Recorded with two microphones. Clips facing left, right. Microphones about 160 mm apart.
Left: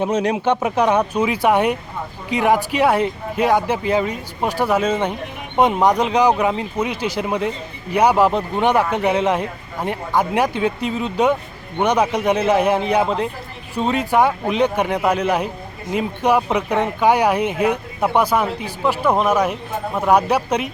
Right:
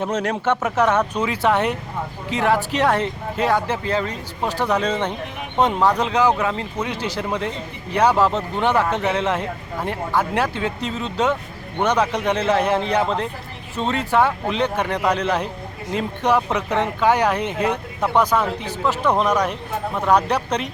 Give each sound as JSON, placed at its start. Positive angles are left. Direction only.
{"t": 0.0, "sound": "speech", "side_deg": 15}